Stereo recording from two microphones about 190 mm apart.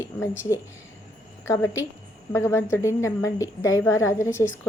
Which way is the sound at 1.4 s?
15° left (ahead or behind).